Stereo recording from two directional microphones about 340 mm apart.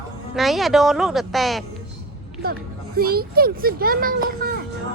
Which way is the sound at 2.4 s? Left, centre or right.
Right.